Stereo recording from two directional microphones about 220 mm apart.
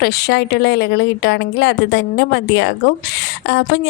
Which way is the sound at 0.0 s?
45° left (ahead or behind).